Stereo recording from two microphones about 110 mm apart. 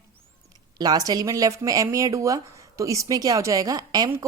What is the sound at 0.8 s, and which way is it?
Speech, 35° right (ahead or behind).